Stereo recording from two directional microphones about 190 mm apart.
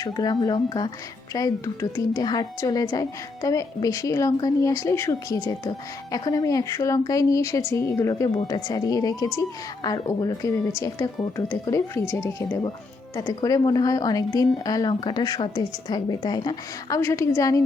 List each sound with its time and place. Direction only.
0.0 s a woman's voice: 20° left (ahead or behind)